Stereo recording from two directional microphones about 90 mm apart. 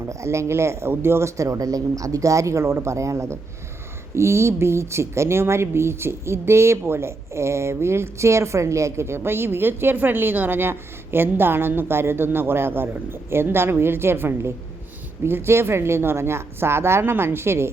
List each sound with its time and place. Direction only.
0.0 s speech: 35° right (ahead or behind)